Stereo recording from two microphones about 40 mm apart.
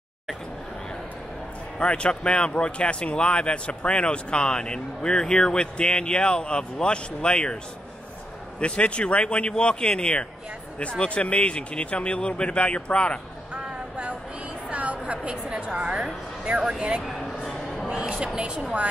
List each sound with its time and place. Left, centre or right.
1.8 s speech: left
8.5 s speech: left
14.7 s music: right
16.4 s speech: right
17.0 s a sound: centre
18.1 s speech: right